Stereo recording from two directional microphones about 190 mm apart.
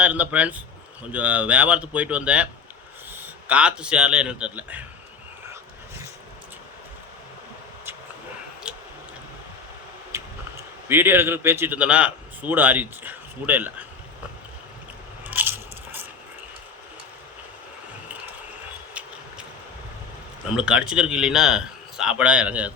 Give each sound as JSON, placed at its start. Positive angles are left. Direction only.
{"t": 0.0, "sound": "a man's voice", "side_deg": -10}
{"t": 8.7, "sound": "a sound", "side_deg": -5}
{"t": 10.8, "sound": "speech", "side_deg": -10}
{"t": 15.2, "sound": "biting", "side_deg": -10}
{"t": 20.6, "sound": "a man's voice", "side_deg": -5}